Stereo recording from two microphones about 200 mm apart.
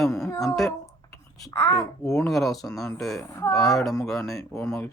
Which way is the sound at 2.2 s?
Centre (ahead or behind).